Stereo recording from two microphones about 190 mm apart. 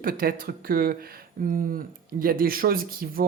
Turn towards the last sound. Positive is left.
turn(degrees=-50)  # may be behind; listen again after turning